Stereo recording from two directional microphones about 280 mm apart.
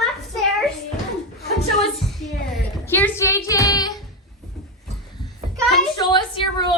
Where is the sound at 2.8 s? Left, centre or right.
Centre.